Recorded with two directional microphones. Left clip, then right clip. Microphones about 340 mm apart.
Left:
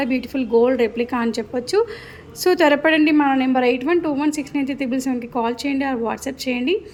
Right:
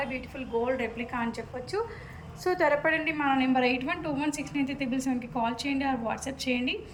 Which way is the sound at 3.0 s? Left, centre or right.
Centre.